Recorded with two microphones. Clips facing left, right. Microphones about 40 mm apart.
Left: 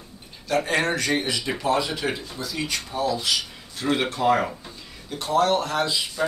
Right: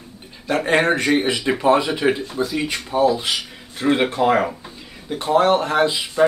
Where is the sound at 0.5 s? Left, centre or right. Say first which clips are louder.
Right 5 dB; right.